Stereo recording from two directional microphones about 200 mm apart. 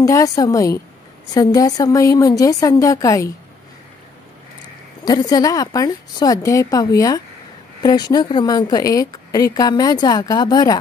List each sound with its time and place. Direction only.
0.0 s a woman's voice: 15° left (ahead or behind)
5.0 s a woman's voice: 20° left (ahead or behind)